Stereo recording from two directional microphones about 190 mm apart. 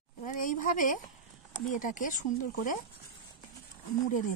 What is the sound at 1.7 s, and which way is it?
Speech, 45° left (ahead or behind).